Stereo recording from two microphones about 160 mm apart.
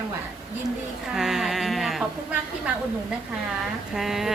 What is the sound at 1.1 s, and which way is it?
Speech, centre (ahead or behind).